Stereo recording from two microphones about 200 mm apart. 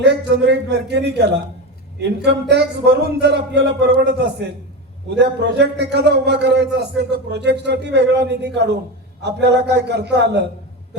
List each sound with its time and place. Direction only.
0.0 s a man's voice: 55° right (ahead or behind)